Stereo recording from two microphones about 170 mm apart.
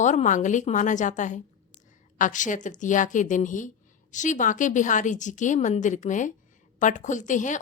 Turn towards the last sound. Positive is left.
turn(degrees=50)  # may be behind; listen again after turning